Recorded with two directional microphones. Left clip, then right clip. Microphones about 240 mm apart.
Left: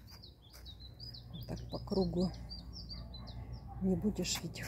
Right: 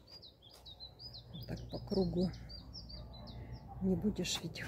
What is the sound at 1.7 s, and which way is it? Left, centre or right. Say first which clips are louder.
Speech: left 1 dB; centre.